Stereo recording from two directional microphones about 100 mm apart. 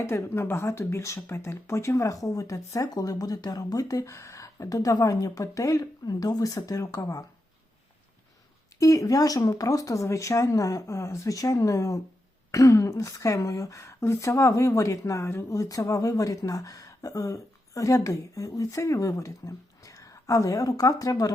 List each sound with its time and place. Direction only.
0.0 s speech: 25° left (ahead or behind)
8.8 s speech: 35° left (ahead or behind)